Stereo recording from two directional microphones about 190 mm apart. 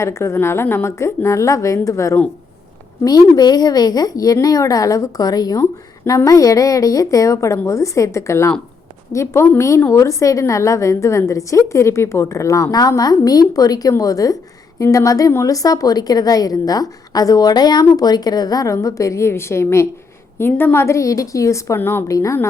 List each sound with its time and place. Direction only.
0.0 s a woman's voice: 15° left (ahead or behind)